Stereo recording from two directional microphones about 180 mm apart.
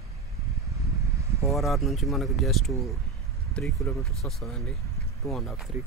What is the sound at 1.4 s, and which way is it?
Speech, centre (ahead or behind).